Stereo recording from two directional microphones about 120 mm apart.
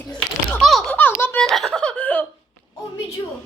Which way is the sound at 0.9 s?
15° left (ahead or behind).